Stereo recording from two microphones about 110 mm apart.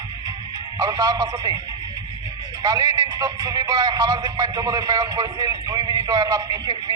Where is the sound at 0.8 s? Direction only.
35° right (ahead or behind).